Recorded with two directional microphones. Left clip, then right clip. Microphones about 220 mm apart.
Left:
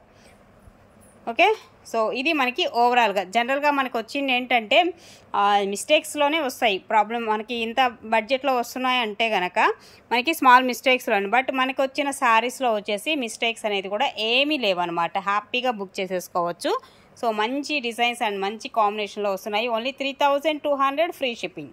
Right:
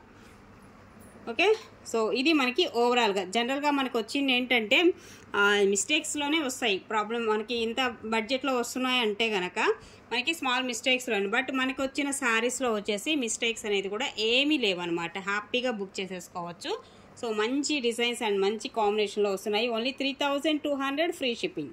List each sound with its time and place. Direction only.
1.2 s a woman's voice: 10° left (ahead or behind)